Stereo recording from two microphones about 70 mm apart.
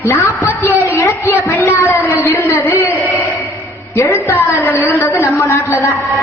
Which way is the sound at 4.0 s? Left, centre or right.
Left.